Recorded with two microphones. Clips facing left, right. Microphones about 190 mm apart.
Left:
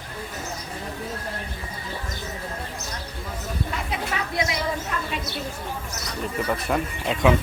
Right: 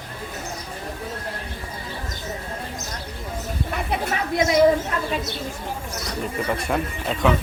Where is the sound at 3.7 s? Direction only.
55° right (ahead or behind).